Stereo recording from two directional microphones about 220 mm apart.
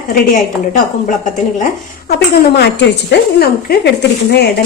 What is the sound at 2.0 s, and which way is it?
Speech, 45° left (ahead or behind).